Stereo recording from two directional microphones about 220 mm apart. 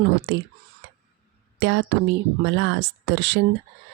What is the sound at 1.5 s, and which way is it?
Speech, 55° right (ahead or behind).